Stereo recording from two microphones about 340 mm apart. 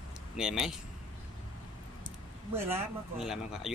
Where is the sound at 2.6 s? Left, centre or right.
Centre.